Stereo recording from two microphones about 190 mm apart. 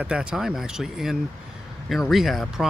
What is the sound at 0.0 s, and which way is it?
Speech, 5° right (ahead or behind).